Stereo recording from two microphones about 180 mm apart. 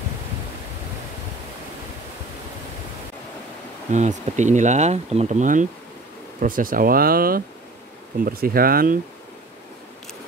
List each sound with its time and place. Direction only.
3.9 s speech: 40° right (ahead or behind)